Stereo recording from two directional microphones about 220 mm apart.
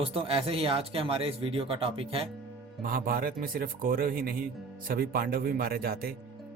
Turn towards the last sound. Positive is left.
turn(degrees=-45)  # may be behind; listen again after turning